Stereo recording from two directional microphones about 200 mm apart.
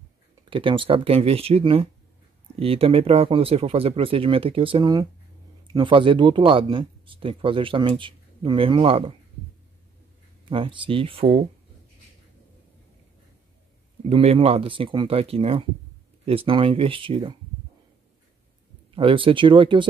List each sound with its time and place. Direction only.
0.5 s speech: 25° right (ahead or behind)
10.5 s speech: 25° right (ahead or behind)
14.0 s speech: 30° right (ahead or behind)
18.9 s speech: 25° right (ahead or behind)